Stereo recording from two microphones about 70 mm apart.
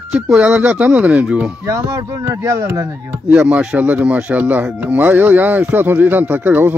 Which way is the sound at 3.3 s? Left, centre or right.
Centre.